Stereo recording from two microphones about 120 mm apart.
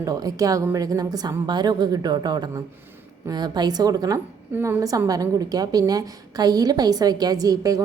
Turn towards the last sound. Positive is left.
turn(degrees=-30)  # may be behind; listen again after turning